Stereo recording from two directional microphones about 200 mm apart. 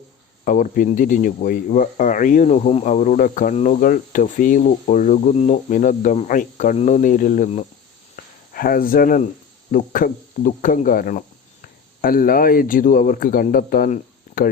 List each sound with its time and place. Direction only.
0.4 s speech: 40° left (ahead or behind)
8.1 s a sound: 45° left (ahead or behind)
9.7 s speech: 45° left (ahead or behind)